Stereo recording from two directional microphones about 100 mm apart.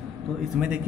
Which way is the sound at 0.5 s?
10° right (ahead or behind).